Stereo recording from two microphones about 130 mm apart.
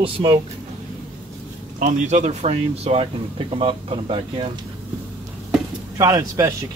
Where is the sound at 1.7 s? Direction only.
70° right (ahead or behind); by 4.5 s 45° right (ahead or behind).